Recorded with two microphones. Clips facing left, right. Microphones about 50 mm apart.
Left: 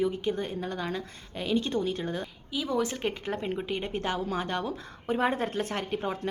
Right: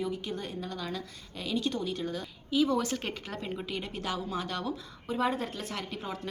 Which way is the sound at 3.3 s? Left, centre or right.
Left.